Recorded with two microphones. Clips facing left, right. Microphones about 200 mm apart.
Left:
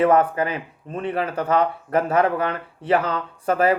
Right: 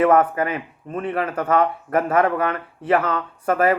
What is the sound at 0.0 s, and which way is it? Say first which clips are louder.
Speech: right 1 dB; 35° left (ahead or behind).